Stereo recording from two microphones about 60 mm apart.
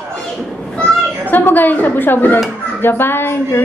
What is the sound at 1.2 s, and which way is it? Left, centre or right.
A woman's voice, left.